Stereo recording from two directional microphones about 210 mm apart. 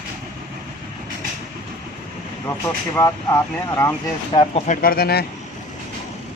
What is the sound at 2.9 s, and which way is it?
Speech, 15° left (ahead or behind).